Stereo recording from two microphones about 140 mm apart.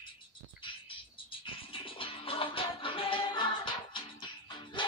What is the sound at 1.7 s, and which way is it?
Music, 40° left (ahead or behind).